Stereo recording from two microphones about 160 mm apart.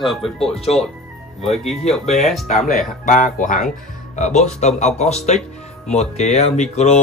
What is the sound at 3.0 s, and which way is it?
Speech, 55° left (ahead or behind).